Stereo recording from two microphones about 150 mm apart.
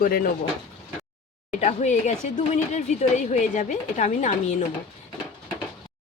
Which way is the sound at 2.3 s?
50° left (ahead or behind).